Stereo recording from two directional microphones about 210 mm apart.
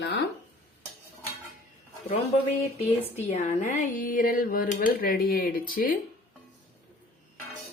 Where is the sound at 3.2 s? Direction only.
30° left (ahead or behind).